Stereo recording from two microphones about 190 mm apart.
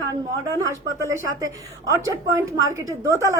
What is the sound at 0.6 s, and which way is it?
A woman's voice, 15° right (ahead or behind).